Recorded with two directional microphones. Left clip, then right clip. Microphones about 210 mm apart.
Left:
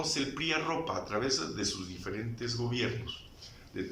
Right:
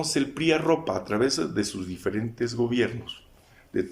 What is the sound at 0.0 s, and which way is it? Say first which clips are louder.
Speech: right 7 dB; 45° right (ahead or behind).